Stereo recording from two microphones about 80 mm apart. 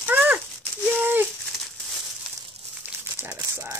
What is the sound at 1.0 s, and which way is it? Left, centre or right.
Rattle, right.